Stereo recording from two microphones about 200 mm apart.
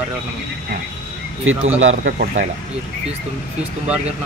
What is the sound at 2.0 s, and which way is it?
Speech, 40° right (ahead or behind).